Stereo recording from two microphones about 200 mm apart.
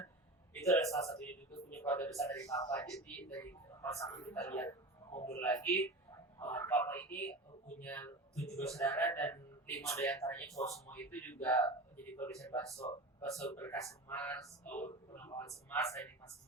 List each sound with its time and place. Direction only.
1.7 s a man's voice: 15° left (ahead or behind)
12.7 s speech: 30° left (ahead or behind)
13.2 s a man's voice: 15° left (ahead or behind)